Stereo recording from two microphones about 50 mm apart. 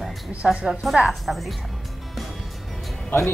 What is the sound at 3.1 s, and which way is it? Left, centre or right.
Speech, left.